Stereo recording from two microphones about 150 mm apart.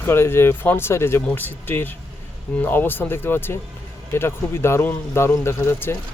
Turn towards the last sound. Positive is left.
turn(degrees=15)  # may be behind; listen again after turning